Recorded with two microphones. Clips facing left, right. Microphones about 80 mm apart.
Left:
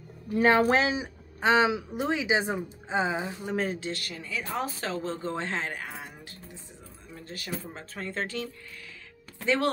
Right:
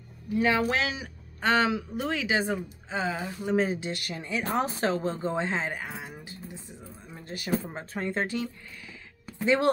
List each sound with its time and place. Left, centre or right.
0.3 s a woman's voice: left; by 3.4 s centre
3.4 s speech: centre
7.1 s a sound: centre
7.6 s speech: centre